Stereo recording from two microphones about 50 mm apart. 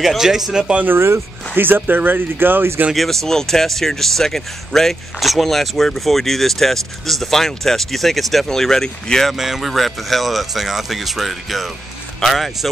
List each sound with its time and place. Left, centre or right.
0.0 s speech: centre
0.8 s speech: right
1.5 s speech: right
2.9 s speech: centre
9.3 s speech: centre